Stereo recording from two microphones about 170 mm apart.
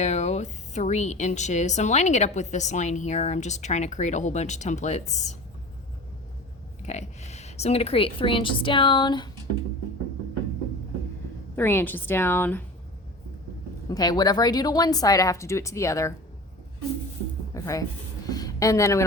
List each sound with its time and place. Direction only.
0.0 s a woman's voice: 40° left (ahead or behind)
6.8 s a woman's voice: 40° left (ahead or behind); by 9.3 s 25° left (ahead or behind)
11.5 s a woman's voice: 10° left (ahead or behind)
13.9 s speech: 25° left (ahead or behind)
17.5 s speech: 20° left (ahead or behind)